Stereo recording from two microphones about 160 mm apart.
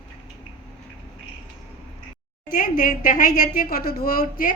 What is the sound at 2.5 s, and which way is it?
A woman's voice, 60° left (ahead or behind).